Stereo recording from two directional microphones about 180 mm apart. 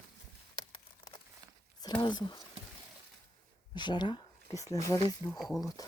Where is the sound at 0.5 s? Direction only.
25° left (ahead or behind).